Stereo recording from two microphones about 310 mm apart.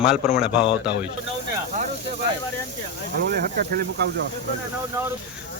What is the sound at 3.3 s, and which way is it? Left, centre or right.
Speech, right.